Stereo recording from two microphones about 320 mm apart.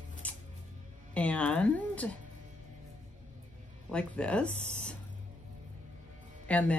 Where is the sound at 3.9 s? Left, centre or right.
Centre.